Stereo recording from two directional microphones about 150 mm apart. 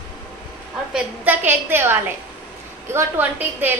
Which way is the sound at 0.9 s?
10° right (ahead or behind).